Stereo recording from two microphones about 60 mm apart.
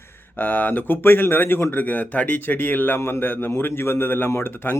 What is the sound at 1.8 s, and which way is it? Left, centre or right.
A man's voice, left.